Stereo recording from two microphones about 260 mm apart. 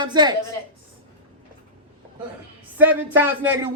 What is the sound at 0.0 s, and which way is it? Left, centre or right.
Speech, centre.